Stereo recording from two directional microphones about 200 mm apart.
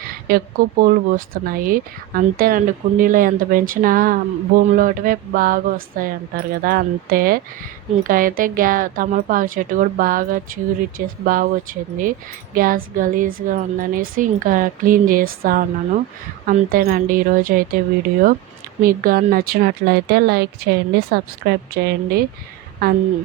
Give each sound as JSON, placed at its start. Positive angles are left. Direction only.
{"t": 0.3, "sound": "speech", "side_deg": -45}
{"t": 18.8, "sound": "speech", "side_deg": -45}